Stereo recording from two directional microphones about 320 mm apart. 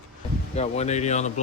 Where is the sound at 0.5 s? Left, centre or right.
Left.